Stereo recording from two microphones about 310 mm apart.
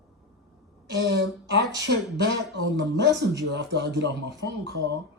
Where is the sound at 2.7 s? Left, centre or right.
Right.